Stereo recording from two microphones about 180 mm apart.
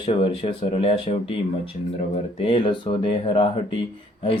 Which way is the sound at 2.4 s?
30° left (ahead or behind).